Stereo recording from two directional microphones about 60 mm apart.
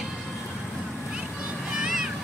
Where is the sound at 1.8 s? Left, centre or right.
Centre.